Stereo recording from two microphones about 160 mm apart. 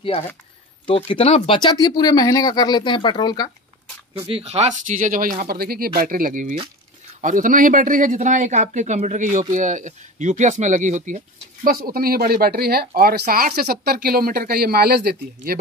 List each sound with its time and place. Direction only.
0.8 s speech: 35° left (ahead or behind)
4.3 s speech: 40° right (ahead or behind); by 15.5 s 80° right